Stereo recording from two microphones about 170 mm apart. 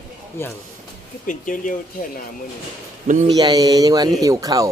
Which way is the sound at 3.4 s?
25° right (ahead or behind).